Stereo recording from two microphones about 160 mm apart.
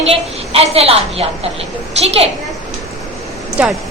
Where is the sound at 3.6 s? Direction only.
10° right (ahead or behind).